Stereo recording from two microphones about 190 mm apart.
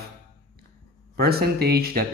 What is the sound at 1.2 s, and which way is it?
Speech, 55° right (ahead or behind).